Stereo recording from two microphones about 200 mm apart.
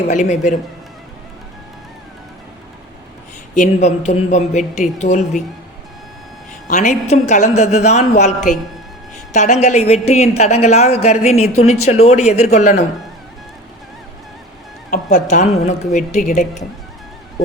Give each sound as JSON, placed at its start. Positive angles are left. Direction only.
{"t": 0.1, "sound": "a woman's voice", "side_deg": 35}
{"t": 3.5, "sound": "a woman's voice", "side_deg": 35}
{"t": 6.7, "sound": "a woman's voice", "side_deg": 40}
{"t": 14.8, "sound": "a woman's voice", "side_deg": 40}